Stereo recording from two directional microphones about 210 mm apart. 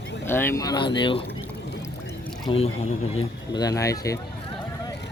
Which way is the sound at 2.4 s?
30° left (ahead or behind).